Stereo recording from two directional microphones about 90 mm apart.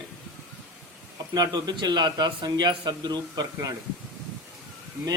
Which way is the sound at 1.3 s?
50° right (ahead or behind).